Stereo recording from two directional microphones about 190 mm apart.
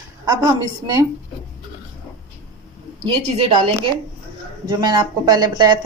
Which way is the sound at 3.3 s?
30° right (ahead or behind).